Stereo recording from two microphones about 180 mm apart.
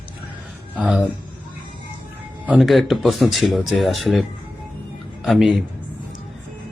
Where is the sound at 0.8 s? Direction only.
Centre (ahead or behind).